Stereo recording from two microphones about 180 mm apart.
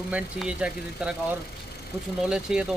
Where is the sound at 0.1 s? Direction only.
5° right (ahead or behind).